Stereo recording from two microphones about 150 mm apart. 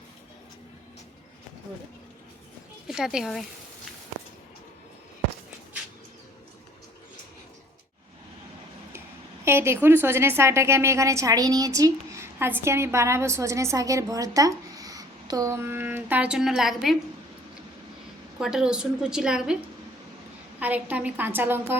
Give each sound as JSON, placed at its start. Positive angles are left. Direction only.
{"t": 2.8, "sound": "speech", "side_deg": -5}
{"t": 9.4, "sound": "a woman's voice", "side_deg": -15}
{"t": 18.3, "sound": "a woman's voice", "side_deg": -5}
{"t": 20.6, "sound": "a woman's voice", "side_deg": -10}